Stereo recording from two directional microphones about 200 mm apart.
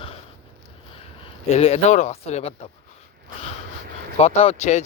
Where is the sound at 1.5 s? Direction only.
30° left (ahead or behind).